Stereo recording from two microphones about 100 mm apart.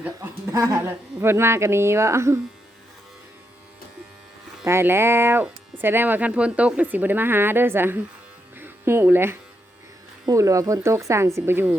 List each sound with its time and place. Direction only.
0.2 s speech: 35° right (ahead or behind)
4.6 s speech: 25° right (ahead or behind)